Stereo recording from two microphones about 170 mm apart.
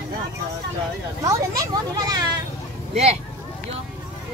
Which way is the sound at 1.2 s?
20° right (ahead or behind).